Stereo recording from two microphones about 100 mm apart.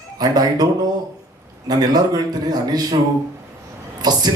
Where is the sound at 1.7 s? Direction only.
40° right (ahead or behind).